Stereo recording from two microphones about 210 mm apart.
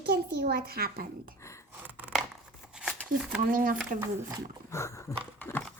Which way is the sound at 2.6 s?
5° right (ahead or behind).